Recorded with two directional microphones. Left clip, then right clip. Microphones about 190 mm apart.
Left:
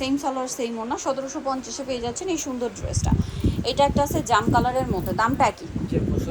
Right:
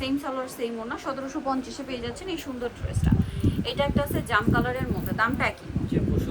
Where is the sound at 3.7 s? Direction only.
25° left (ahead or behind).